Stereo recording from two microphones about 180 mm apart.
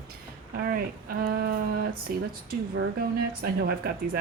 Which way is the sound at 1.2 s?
60° right (ahead or behind).